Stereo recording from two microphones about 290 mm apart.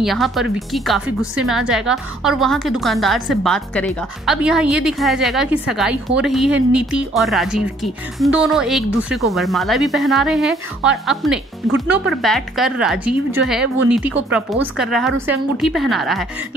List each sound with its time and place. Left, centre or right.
0.0 s speech: centre